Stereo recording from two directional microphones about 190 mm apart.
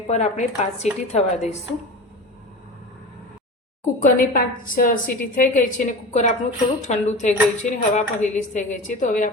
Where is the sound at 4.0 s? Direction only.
45° left (ahead or behind).